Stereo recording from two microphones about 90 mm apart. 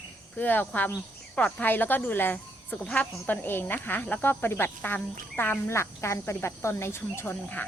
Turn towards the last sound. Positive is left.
turn(degrees=20)  # may be behind; listen again after turning